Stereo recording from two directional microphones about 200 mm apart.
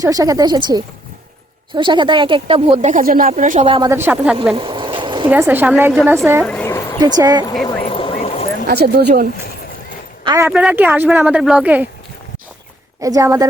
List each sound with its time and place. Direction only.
0.0 s speech: 15° right (ahead or behind); by 3.7 s 40° right (ahead or behind)
3.7 s speech: 20° right (ahead or behind)
4.5 s a sound: 25° right (ahead or behind)
5.3 s speech: 10° right (ahead or behind)
6.4 s a sound: 5° left (ahead or behind)
7.0 s speech: 20° right (ahead or behind)
7.6 s vehicle: 25° left (ahead or behind)
8.6 s speech: 55° right (ahead or behind)
10.2 s speech: 15° right (ahead or behind)
10.5 s speech: 5° right (ahead or behind)
13.0 s speech: 15° right (ahead or behind)